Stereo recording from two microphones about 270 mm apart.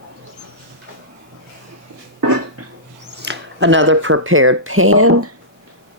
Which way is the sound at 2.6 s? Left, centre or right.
Right.